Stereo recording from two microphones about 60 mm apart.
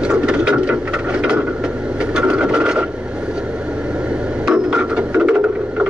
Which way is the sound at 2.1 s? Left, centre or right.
Centre.